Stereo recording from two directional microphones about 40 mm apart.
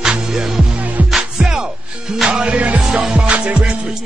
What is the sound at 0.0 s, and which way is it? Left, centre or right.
Music, centre.